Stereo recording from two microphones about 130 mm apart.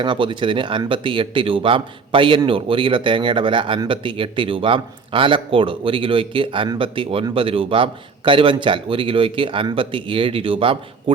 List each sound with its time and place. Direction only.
0.0 s a man's voice: 40° right (ahead or behind)